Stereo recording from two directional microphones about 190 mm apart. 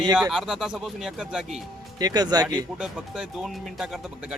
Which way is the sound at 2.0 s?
20° right (ahead or behind).